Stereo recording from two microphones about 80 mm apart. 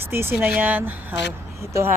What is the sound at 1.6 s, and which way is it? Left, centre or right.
Speech, right.